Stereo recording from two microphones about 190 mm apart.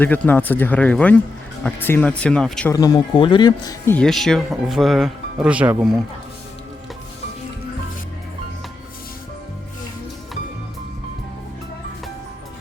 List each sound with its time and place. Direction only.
0.0 s speech: 10° left (ahead or behind)
2.7 s speech: 20° left (ahead or behind)
3.9 s speech: centre (ahead or behind)